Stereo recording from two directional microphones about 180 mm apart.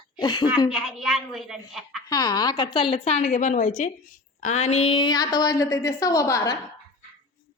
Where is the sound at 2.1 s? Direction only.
20° left (ahead or behind).